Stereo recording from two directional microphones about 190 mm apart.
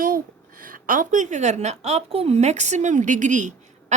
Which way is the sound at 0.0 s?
45° right (ahead or behind).